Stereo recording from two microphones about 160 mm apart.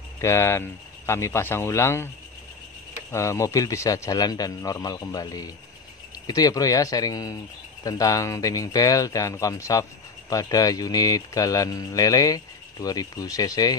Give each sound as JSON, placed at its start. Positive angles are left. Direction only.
{"t": 0.2, "sound": "speech", "side_deg": 15}
{"t": 3.1, "sound": "speech", "side_deg": 20}